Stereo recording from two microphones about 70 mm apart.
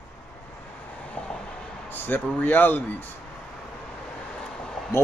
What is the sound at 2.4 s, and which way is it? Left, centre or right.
Speech, left.